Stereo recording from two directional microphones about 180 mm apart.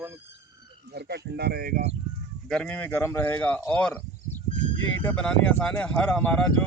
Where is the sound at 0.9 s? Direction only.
65° right (ahead or behind).